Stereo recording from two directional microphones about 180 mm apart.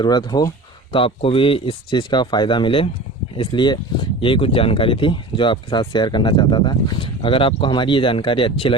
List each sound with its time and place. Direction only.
0.0 s speech: 25° left (ahead or behind)